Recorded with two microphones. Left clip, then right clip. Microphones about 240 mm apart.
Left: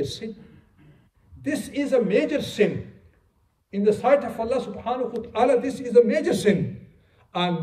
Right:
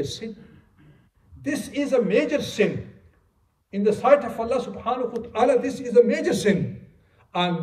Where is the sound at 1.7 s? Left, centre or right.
Centre.